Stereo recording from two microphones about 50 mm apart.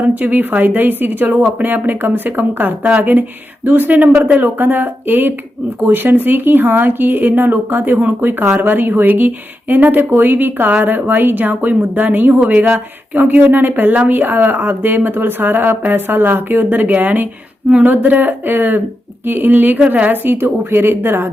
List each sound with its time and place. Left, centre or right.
0.0 s speech: right
17.9 s a woman's voice: right